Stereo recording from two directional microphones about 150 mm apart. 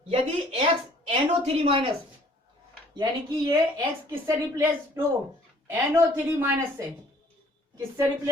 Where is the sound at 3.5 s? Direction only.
25° right (ahead or behind).